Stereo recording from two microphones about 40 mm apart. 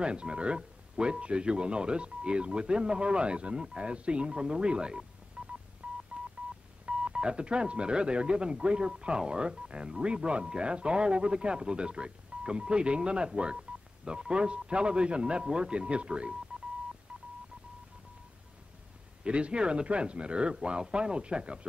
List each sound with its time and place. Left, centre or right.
0.0 s speech: right
5.4 s telephone dialing: right
6.9 s speech: right
17.1 s telephone dialing: right
19.2 s speech: right